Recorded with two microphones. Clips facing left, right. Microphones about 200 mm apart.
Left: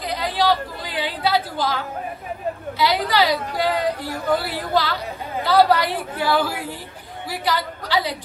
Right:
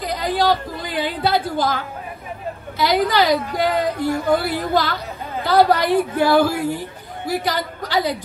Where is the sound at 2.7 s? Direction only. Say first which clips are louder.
Right 3 dB; 50° right (ahead or behind).